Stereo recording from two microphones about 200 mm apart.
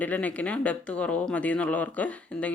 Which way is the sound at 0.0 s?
10° left (ahead or behind).